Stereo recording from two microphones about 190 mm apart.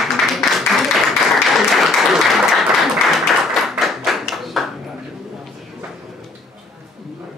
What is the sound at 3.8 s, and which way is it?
Clapping, centre (ahead or behind).